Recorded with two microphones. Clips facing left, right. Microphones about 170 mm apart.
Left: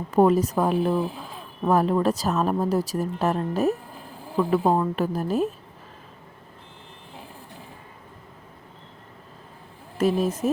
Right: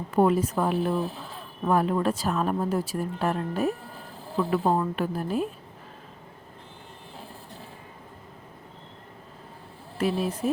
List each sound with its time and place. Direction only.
0.1 s a woman's voice: 40° left (ahead or behind)
10.0 s speech: 45° left (ahead or behind)